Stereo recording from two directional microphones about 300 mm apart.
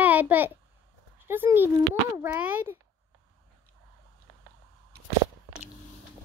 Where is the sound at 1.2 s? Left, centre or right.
Centre.